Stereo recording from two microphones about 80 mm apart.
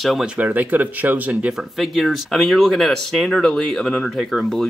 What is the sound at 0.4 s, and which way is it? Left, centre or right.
Speech, right.